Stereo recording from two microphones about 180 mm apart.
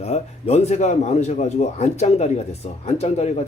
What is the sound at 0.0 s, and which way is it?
A man's voice, 35° left (ahead or behind).